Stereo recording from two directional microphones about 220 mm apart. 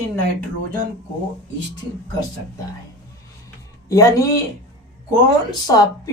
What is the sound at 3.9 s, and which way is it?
Speech, 15° left (ahead or behind).